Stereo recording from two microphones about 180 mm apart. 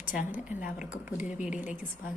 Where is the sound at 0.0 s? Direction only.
50° left (ahead or behind).